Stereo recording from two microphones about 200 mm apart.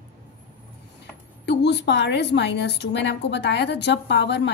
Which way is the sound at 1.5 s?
60° left (ahead or behind).